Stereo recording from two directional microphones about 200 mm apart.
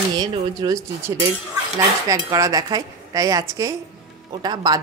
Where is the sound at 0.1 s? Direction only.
20° right (ahead or behind).